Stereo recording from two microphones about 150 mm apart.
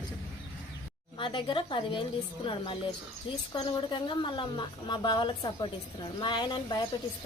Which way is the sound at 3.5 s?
30° left (ahead or behind).